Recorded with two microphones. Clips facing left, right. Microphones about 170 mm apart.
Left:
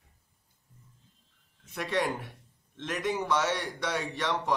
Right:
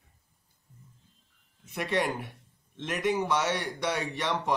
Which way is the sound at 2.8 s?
10° right (ahead or behind).